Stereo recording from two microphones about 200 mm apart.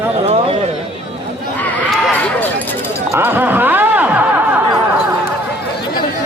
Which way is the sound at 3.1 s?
10° right (ahead or behind).